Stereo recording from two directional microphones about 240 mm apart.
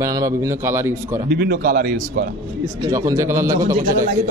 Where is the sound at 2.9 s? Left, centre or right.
Centre.